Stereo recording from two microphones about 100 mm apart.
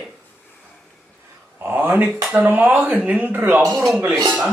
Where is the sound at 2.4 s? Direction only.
15° right (ahead or behind).